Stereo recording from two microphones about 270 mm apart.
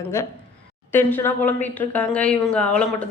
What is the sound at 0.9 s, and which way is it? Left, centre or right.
A woman's voice, centre.